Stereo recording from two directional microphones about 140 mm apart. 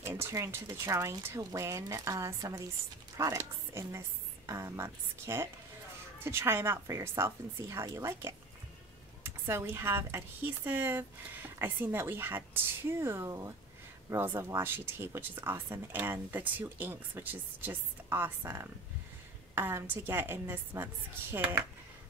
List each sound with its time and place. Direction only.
0.0 s speech: 20° right (ahead or behind)